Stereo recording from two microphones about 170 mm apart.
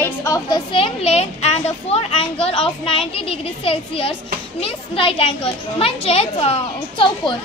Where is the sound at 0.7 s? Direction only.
30° left (ahead or behind).